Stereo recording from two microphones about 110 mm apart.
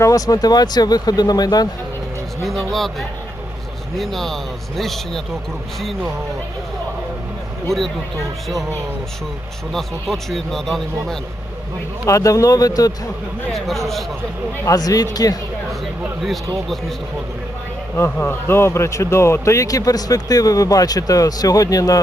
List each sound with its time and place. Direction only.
0.0 s speech: 30° left (ahead or behind)
2.4 s speech: centre (ahead or behind)
9.7 s speech: 5° left (ahead or behind)
12.0 s speech: 30° left (ahead or behind)
13.5 s speech: centre (ahead or behind)
14.6 s speech: 35° left (ahead or behind)
17.9 s speech: 20° left (ahead or behind)